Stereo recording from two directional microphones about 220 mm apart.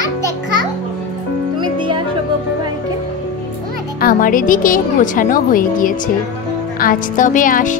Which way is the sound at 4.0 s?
40° left (ahead or behind).